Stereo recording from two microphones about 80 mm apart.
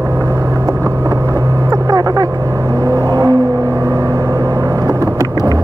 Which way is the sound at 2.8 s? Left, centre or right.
Right.